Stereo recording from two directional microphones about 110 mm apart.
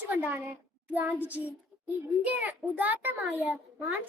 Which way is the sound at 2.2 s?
15° right (ahead or behind).